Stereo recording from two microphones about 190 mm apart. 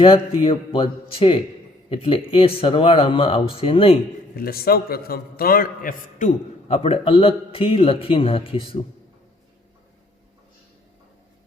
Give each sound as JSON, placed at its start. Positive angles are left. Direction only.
{"t": 0.0, "sound": "speech", "side_deg": 30}
{"t": 4.4, "sound": "a man's voice", "side_deg": 50}